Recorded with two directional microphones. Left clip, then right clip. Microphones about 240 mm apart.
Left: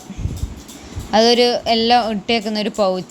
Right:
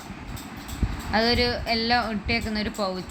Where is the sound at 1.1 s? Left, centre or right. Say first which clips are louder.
Left 10 dB; left.